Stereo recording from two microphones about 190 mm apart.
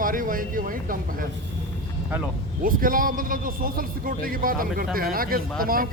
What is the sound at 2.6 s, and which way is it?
A man's voice, 45° right (ahead or behind).